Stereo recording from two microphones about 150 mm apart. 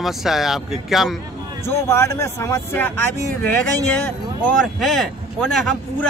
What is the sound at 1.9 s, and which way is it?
A man's voice, 20° left (ahead or behind).